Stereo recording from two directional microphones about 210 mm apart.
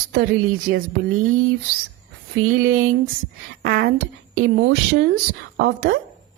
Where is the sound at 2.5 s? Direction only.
75° right (ahead or behind).